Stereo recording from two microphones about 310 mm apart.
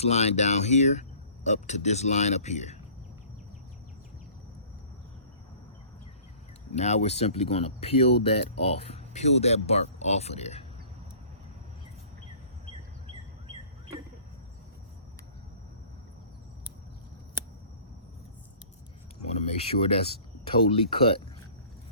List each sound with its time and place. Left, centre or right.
0.0 s speech: left
6.7 s speech: left
19.3 s speech: centre